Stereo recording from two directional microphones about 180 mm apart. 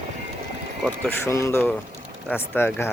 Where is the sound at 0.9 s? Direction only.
15° left (ahead or behind).